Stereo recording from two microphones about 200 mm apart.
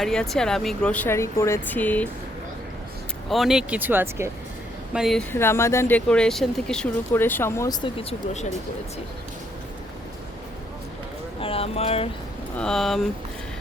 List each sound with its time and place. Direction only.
0.0 s speech: centre (ahead or behind)
3.2 s speech: centre (ahead or behind)
4.9 s speech: centre (ahead or behind)
5.3 s speech: 10° left (ahead or behind)
11.3 s speech: 30° left (ahead or behind)
12.5 s speech: 5° left (ahead or behind)